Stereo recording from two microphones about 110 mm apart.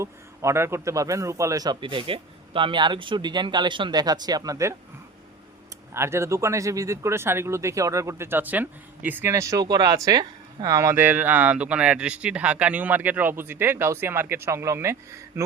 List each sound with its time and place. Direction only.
0.0 s a man's voice: 25° right (ahead or behind)
5.9 s speech: 25° right (ahead or behind)
9.3 s speech: 30° right (ahead or behind)